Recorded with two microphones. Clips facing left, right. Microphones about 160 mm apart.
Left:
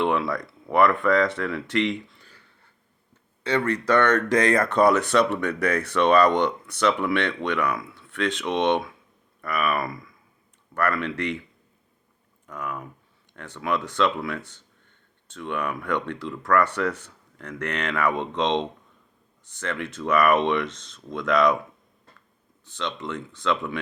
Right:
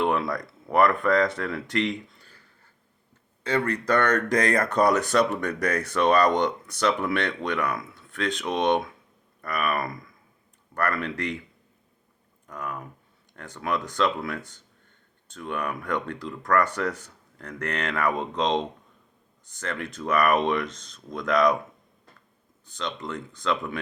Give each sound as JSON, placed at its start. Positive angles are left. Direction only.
{"t": 0.0, "sound": "speech", "side_deg": -40}
{"t": 3.5, "sound": "speech", "side_deg": -35}
{"t": 12.5, "sound": "speech", "side_deg": -35}
{"t": 22.8, "sound": "speech", "side_deg": -35}